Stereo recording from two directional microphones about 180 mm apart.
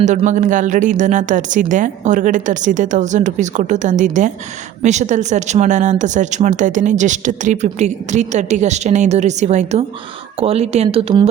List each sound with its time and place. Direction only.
0.0 s a woman's voice: 40° right (ahead or behind)